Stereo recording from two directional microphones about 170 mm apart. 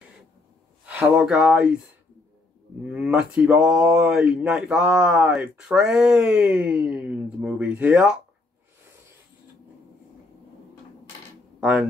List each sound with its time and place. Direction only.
0.8 s speech: 10° right (ahead or behind)
2.8 s speech: 5° right (ahead or behind)